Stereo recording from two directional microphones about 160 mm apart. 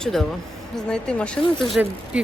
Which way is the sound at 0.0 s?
5° left (ahead or behind).